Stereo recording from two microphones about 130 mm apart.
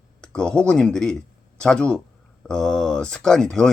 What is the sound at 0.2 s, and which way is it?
Speech, 5° left (ahead or behind).